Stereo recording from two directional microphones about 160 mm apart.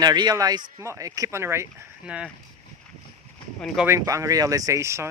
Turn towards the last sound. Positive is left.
turn(degrees=-15)  # may be behind; listen again after turning